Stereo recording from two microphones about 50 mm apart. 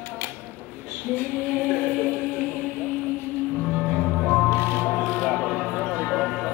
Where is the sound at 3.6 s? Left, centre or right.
Centre.